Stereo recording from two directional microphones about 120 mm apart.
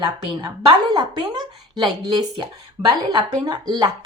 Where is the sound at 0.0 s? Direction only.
40° right (ahead or behind).